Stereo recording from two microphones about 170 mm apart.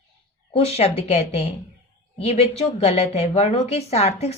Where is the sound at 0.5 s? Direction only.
35° left (ahead or behind).